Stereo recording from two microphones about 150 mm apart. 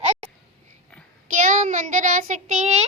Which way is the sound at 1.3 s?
55° right (ahead or behind).